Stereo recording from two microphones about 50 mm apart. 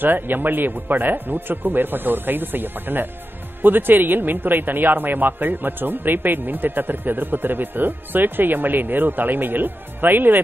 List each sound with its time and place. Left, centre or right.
0.0 s speech: right